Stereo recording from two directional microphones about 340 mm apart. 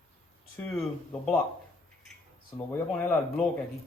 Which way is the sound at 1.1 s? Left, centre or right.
Centre.